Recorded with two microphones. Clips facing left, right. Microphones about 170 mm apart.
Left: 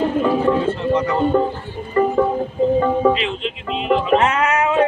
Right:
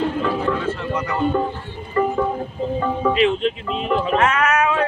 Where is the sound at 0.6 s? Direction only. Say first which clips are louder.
Left 6 dB; 30° left (ahead or behind).